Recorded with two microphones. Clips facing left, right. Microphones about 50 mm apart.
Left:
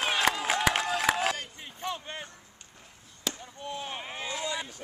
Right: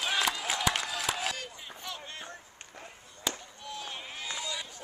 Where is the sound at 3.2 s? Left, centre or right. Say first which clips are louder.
Even; centre.